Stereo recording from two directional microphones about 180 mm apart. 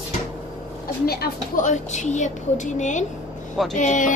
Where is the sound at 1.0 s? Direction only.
60° left (ahead or behind).